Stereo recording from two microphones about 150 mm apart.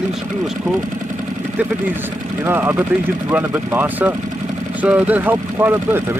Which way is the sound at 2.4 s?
15° right (ahead or behind).